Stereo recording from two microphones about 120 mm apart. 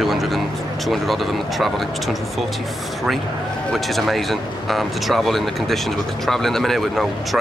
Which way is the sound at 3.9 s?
Centre (ahead or behind).